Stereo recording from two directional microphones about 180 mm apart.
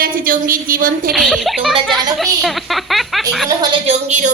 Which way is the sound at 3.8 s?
40° right (ahead or behind).